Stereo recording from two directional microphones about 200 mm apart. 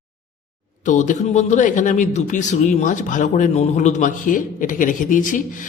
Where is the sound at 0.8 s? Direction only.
40° left (ahead or behind).